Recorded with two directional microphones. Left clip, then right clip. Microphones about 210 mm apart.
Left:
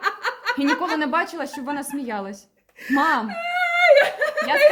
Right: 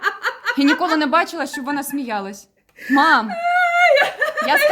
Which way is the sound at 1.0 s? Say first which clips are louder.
Right 5 dB; 40° right (ahead or behind).